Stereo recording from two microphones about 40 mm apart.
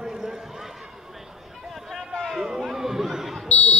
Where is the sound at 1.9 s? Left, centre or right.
Centre.